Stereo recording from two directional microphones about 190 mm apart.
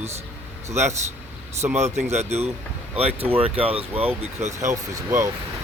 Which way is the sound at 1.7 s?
35° right (ahead or behind).